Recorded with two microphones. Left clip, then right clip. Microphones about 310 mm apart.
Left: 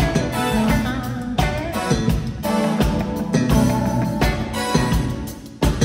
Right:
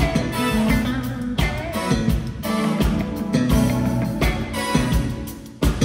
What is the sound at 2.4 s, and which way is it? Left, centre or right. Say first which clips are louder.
Music: left 3 dB; left.